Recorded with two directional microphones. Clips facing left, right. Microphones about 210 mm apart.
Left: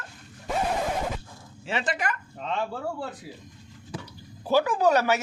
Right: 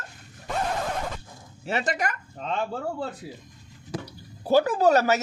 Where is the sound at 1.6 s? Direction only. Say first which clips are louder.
Right 2 dB; 40° right (ahead or behind).